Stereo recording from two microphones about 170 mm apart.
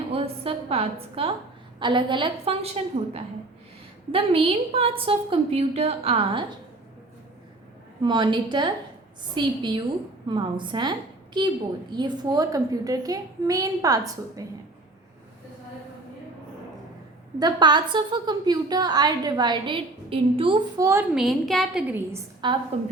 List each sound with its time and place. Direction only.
0.1 s a woman's voice: 35° right (ahead or behind)
4.1 s a woman's voice: 35° right (ahead or behind)
8.0 s a woman's voice: 25° right (ahead or behind)
11.9 s a woman's voice: 25° right (ahead or behind)
17.4 s a woman's voice: 25° right (ahead or behind)
20.8 s a woman's voice: 15° right (ahead or behind)
21.2 s a woman's voice: centre (ahead or behind)
22.4 s a woman's voice: 25° right (ahead or behind)